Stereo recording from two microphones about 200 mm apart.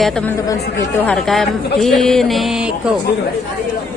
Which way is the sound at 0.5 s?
15° left (ahead or behind).